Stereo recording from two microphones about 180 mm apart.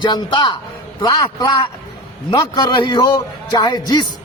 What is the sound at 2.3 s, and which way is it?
A man's voice, 20° left (ahead or behind).